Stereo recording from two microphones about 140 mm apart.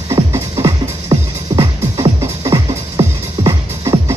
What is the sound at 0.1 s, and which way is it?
Music, 25° right (ahead or behind).